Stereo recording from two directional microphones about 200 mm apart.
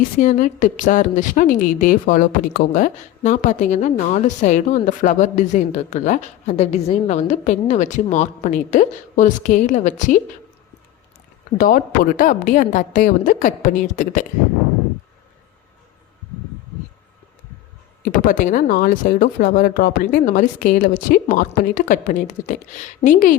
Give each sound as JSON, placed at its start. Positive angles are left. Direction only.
{"t": 0.2, "sound": "a woman's voice", "side_deg": 40}
{"t": 11.5, "sound": "a woman's voice", "side_deg": 45}
{"t": 18.0, "sound": "speech", "side_deg": 45}